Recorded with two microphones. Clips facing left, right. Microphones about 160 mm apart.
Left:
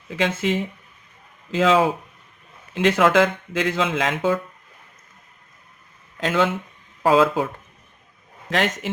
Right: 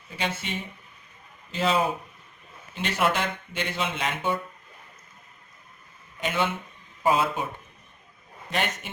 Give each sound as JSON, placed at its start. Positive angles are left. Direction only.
{"t": 0.1, "sound": "speech", "side_deg": 90}
{"t": 6.1, "sound": "speech", "side_deg": 90}
{"t": 8.4, "sound": "speech", "side_deg": 90}